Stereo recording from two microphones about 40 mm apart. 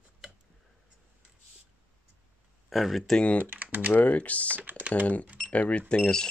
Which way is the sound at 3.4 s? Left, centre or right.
Right.